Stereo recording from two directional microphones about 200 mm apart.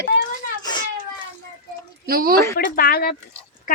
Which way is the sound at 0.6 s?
20° left (ahead or behind).